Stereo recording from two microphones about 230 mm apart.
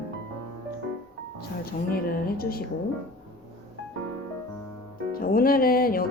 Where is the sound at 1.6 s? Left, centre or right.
Left.